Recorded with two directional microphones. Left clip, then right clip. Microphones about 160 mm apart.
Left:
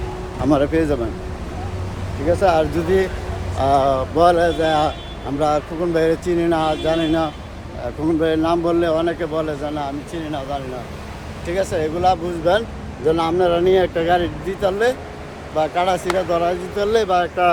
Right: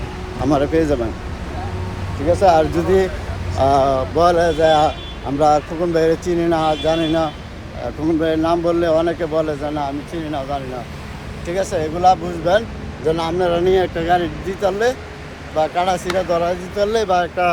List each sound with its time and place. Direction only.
0.4 s a man's voice: 15° left (ahead or behind)
2.4 s a man's voice: 10° left (ahead or behind)